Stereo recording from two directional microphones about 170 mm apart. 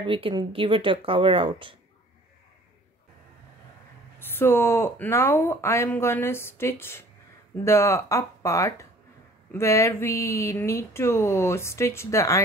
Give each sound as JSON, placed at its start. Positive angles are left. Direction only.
{"t": 0.0, "sound": "speech", "side_deg": -30}
{"t": 4.4, "sound": "speech", "side_deg": 15}